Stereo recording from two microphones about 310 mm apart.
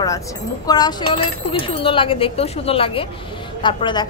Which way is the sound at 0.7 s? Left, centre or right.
Centre.